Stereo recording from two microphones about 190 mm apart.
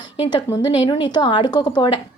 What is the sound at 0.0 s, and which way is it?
Speech, 25° left (ahead or behind).